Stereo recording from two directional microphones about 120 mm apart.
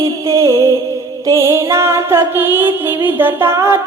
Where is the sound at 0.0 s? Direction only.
25° right (ahead or behind).